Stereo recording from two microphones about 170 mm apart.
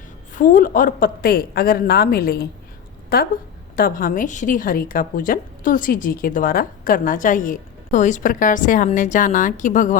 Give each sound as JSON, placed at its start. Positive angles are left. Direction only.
{"t": 0.3, "sound": "a woman's voice", "side_deg": 55}